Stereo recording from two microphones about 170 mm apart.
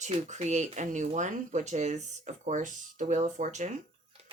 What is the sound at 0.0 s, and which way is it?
Speech, 40° right (ahead or behind).